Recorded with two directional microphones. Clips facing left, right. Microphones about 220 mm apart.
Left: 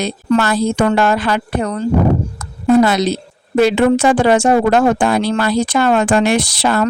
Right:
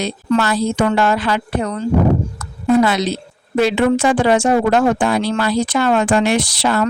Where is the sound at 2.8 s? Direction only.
40° left (ahead or behind).